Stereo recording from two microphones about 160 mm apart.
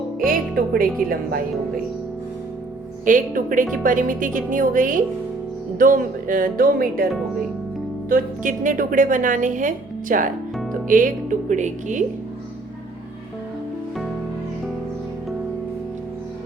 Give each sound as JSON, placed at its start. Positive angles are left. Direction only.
{"t": 0.5, "sound": "speech", "side_deg": -70}
{"t": 3.0, "sound": "a woman's voice", "side_deg": -55}
{"t": 8.1, "sound": "a woman's voice", "side_deg": -55}